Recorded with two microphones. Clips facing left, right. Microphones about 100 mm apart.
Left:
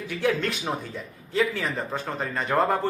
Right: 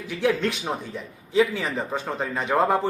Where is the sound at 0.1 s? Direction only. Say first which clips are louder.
Right 2 dB; centre (ahead or behind).